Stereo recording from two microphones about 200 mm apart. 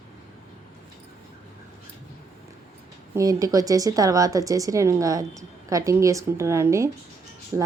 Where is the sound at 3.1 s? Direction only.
15° right (ahead or behind).